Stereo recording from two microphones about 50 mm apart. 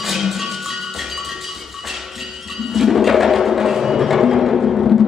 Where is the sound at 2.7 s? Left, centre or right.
Centre.